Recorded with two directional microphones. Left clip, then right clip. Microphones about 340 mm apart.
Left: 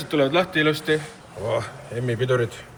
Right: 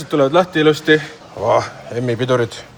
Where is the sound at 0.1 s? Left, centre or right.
Centre.